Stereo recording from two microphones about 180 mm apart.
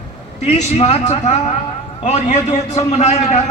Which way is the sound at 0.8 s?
35° left (ahead or behind).